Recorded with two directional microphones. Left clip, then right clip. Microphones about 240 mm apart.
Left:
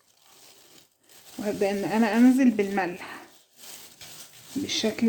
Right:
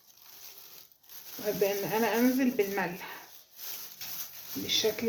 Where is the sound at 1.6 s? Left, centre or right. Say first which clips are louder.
Left 3 dB; left.